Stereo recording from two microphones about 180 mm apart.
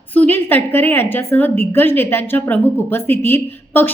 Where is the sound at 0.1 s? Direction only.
10° left (ahead or behind).